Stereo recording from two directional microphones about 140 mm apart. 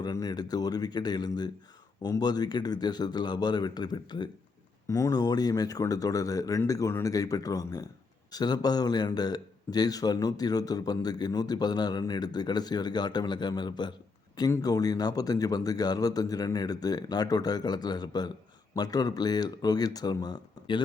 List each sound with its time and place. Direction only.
0.0 s a man's voice: 25° left (ahead or behind)